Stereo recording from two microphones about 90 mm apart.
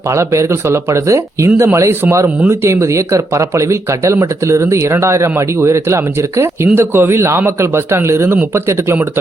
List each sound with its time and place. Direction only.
0.1 s a man's voice: 35° right (ahead or behind)